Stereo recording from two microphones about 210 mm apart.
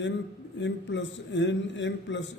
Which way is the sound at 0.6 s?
60° left (ahead or behind).